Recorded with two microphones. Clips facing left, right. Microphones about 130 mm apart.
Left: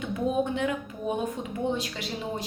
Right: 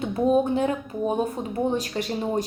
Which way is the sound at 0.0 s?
35° right (ahead or behind).